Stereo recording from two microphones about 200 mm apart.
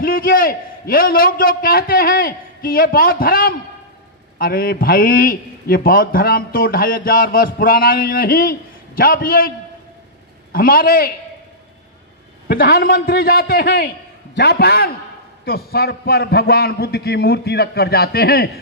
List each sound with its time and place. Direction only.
0.0 s a man's voice: 45° left (ahead or behind)
10.5 s a man's voice: 45° left (ahead or behind)
12.4 s a man's voice: 50° left (ahead or behind)